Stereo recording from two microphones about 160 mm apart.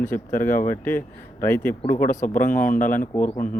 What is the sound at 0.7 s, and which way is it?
Speech, 10° left (ahead or behind).